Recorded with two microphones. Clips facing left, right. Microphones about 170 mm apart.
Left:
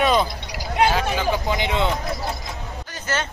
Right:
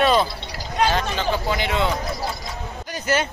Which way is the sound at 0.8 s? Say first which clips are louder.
Right 1 dB; 10° left (ahead or behind).